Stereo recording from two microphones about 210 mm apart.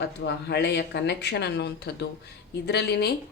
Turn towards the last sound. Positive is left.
turn(degrees=50)  # may be behind; listen again after turning